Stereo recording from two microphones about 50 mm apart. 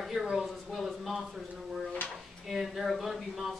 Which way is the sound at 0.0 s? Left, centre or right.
Centre.